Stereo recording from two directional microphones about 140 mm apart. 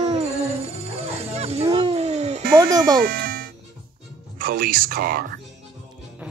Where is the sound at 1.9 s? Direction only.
50° right (ahead or behind).